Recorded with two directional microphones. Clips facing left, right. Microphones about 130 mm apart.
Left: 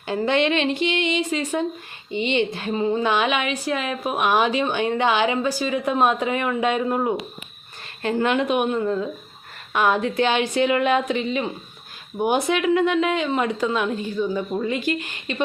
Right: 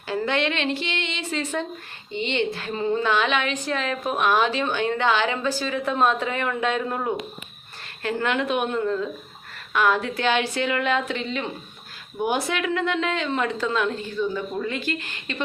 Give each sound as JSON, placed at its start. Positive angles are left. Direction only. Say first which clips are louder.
{"t": 0.1, "sound": "a woman's voice", "louder": "left 4 dB", "side_deg": 20}